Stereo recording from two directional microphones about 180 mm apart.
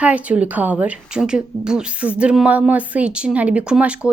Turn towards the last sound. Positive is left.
turn(degrees=-5)  # may be behind; listen again after turning